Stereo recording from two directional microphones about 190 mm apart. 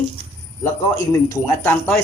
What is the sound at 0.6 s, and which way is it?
Speech, 15° left (ahead or behind).